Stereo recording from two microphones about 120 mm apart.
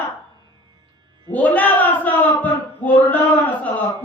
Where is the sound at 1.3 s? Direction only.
15° left (ahead or behind).